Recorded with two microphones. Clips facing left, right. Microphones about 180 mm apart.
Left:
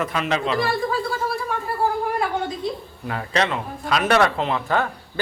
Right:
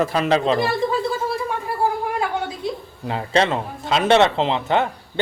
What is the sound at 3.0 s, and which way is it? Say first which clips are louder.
Speech: right 4 dB; 25° right (ahead or behind).